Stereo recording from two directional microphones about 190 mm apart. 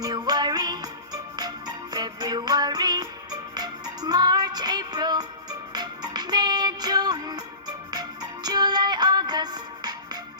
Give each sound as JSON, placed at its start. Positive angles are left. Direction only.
{"t": 0.0, "sound": "music", "side_deg": -20}